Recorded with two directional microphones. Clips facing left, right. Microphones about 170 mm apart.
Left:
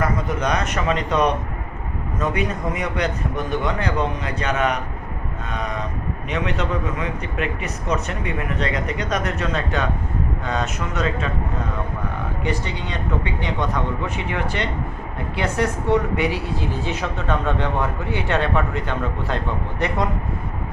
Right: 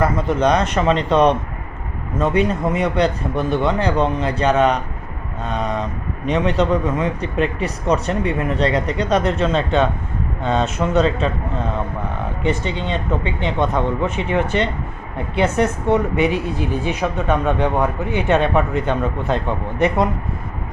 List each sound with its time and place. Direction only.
0.0 s a man's voice: 30° right (ahead or behind)
12.4 s speech: 25° right (ahead or behind)